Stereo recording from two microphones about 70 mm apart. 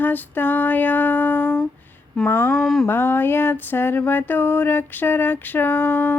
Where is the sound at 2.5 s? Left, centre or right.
Centre.